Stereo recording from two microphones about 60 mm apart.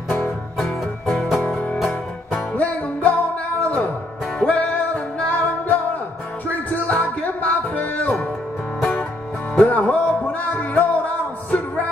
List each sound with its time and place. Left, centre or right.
0.6 s music: centre
2.5 s music: left
9.6 s music: left